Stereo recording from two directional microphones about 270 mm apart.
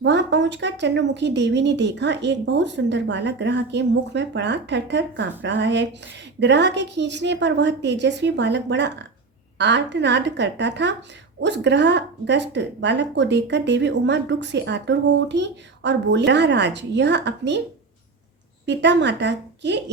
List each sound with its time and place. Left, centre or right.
0.0 s speech: right
18.6 s speech: right